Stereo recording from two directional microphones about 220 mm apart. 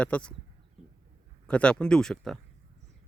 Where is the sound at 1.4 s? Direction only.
5° left (ahead or behind).